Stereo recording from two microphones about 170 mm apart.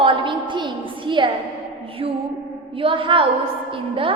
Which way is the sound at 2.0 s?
35° right (ahead or behind).